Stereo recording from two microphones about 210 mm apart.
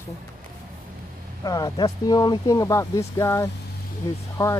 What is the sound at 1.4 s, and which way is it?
Speech, 20° left (ahead or behind).